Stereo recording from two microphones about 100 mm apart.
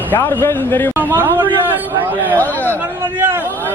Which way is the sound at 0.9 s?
20° right (ahead or behind).